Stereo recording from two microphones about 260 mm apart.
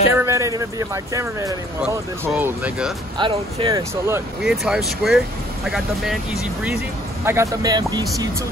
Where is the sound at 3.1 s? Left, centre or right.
Centre.